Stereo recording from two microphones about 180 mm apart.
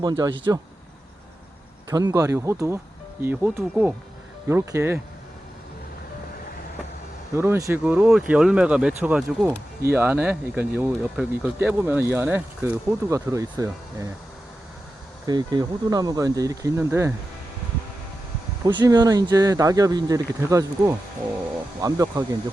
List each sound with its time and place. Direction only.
0.0 s speech: 25° right (ahead or behind)
1.9 s speech: 20° right (ahead or behind)
7.3 s speech: 15° right (ahead or behind)
15.3 s speech: 25° right (ahead or behind)
18.6 s speech: 25° right (ahead or behind)